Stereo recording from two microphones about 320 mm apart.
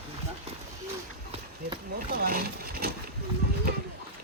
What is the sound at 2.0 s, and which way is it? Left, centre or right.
Boat, right.